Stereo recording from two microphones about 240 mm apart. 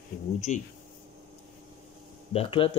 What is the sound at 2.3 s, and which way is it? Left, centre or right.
Speech, left.